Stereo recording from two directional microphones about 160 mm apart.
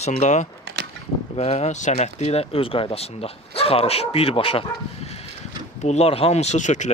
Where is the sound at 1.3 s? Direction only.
40° left (ahead or behind).